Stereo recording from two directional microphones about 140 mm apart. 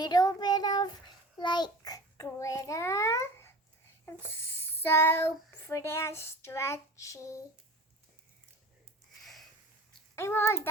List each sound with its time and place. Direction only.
0.0 s child singing: 30° left (ahead or behind)
1.4 s a child's voice: 30° left (ahead or behind)
2.4 s babbling: 20° left (ahead or behind)
4.0 s speech: 15° left (ahead or behind)
10.2 s a child's voice: 20° left (ahead or behind)